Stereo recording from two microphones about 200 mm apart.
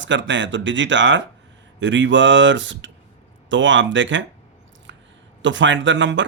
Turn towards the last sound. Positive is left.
turn(degrees=-65)  # may be behind; listen again after turning